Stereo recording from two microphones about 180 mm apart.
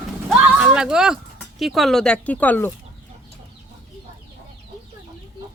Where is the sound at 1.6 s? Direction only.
Centre (ahead or behind).